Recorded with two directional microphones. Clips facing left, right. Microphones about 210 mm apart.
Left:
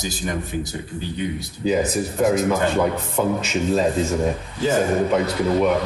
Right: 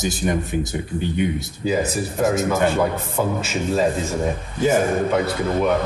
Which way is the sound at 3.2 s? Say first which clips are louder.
Left 1 dB; 5° right (ahead or behind).